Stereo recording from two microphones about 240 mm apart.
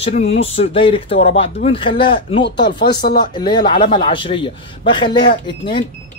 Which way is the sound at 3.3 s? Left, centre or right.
Centre.